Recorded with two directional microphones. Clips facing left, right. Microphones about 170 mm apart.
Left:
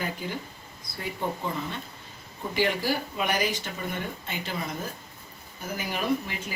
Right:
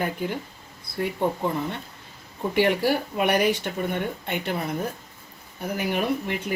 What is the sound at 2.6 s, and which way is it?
Speech, 60° right (ahead or behind).